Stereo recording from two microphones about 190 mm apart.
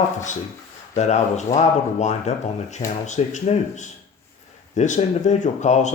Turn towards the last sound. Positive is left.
turn(degrees=40)  # may be behind; listen again after turning